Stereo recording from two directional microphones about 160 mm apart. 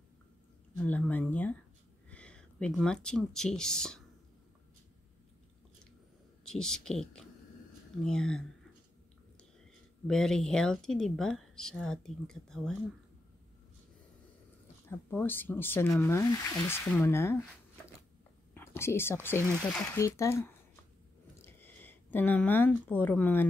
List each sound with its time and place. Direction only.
0.7 s speech: 10° left (ahead or behind)
6.4 s a woman's voice: 5° left (ahead or behind)
10.0 s a woman's voice: 5° left (ahead or behind)
14.9 s speech: 10° left (ahead or behind)
18.5 s speech: 15° left (ahead or behind)
20.0 s speech: 20° left (ahead or behind)